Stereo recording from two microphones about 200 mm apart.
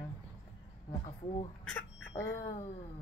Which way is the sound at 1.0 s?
30° left (ahead or behind).